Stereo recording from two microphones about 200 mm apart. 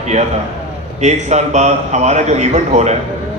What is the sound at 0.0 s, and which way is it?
A man's voice, 35° right (ahead or behind).